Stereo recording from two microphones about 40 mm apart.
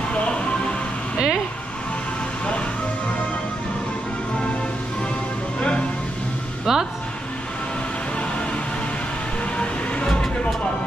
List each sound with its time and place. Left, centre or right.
0.1 s music: left
1.1 s a sound: centre
6.7 s music: centre
9.6 s vehicle: left